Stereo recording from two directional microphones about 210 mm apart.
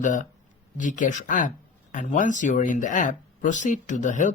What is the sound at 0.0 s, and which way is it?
Speech, 35° left (ahead or behind).